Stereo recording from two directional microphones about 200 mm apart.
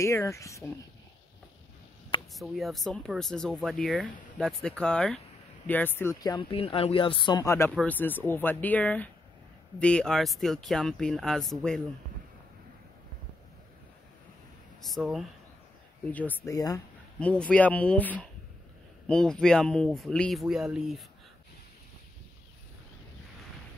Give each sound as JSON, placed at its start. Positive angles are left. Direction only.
{"t": 0.0, "sound": "speech", "side_deg": 15}
{"t": 2.3, "sound": "speech", "side_deg": 0}
{"t": 14.8, "sound": "speech", "side_deg": 0}
{"t": 17.2, "sound": "speech", "side_deg": 5}